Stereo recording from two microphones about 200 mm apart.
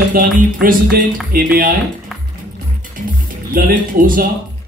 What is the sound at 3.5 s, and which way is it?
Speech, 45° right (ahead or behind).